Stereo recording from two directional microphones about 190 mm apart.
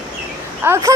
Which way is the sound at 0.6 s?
15° right (ahead or behind).